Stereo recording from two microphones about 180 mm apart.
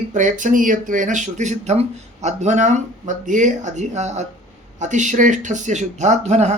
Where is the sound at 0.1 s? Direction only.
45° right (ahead or behind).